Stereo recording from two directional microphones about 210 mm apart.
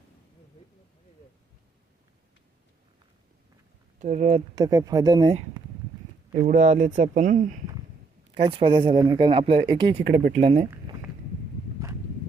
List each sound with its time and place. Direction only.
4.0 s speech: 35° right (ahead or behind)
4.5 s speech: 15° right (ahead or behind)
6.5 s speech: 35° right (ahead or behind)
8.4 s speech: 25° right (ahead or behind)